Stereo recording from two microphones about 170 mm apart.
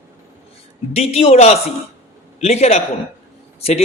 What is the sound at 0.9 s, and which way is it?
A man's voice, 35° left (ahead or behind).